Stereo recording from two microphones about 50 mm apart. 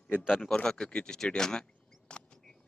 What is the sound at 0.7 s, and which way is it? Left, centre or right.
Speech, centre.